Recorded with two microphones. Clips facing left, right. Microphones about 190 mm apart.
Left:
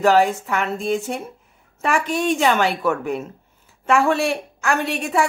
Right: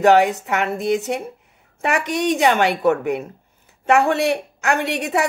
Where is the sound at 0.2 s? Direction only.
20° right (ahead or behind).